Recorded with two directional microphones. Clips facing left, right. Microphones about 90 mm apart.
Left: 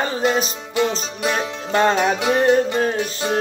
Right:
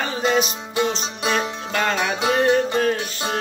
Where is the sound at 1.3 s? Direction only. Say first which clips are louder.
Left 1 dB; 30° left (ahead or behind).